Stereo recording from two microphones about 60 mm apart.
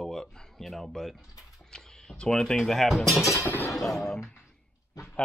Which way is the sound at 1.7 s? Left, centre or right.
Centre.